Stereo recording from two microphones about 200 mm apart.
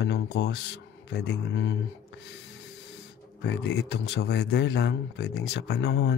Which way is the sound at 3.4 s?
60° left (ahead or behind).